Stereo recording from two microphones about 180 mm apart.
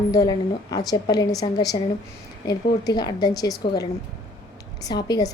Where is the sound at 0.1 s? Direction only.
20° left (ahead or behind).